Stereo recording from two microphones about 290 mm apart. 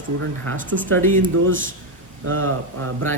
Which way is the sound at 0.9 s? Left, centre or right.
Centre.